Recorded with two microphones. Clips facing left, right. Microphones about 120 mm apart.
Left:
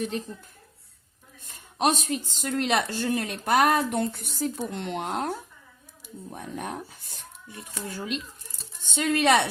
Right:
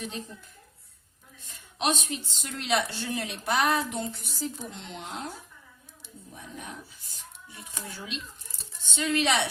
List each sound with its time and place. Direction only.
1.5 s speech: 45° left (ahead or behind)